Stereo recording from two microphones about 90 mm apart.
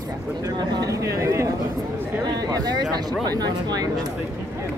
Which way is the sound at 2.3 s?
45° right (ahead or behind).